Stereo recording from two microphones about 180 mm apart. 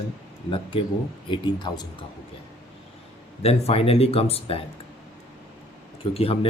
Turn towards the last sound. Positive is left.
turn(degrees=30)  # may be behind; listen again after turning